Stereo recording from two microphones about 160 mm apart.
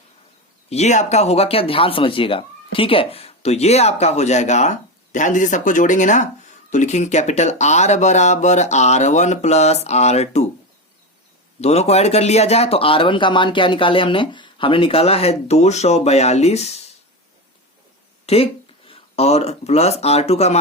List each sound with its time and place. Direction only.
0.7 s speech: 45° left (ahead or behind)
11.6 s speech: 40° left (ahead or behind)
18.3 s speech: 40° left (ahead or behind)